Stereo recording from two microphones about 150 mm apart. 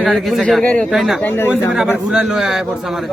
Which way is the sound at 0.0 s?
Centre (ahead or behind).